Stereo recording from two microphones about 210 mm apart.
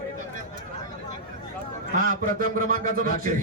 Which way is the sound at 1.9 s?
40° right (ahead or behind).